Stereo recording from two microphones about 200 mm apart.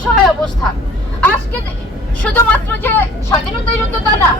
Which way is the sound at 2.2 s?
10° left (ahead or behind).